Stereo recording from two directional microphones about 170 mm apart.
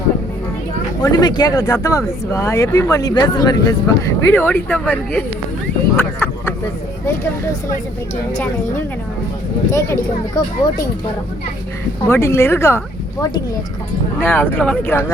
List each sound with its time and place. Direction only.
1.1 s speech: 25° left (ahead or behind)
6.0 s a sound: 15° left (ahead or behind)
9.7 s speech: 15° left (ahead or behind)
12.0 s speech: 15° left (ahead or behind)
14.2 s speech: 10° left (ahead or behind)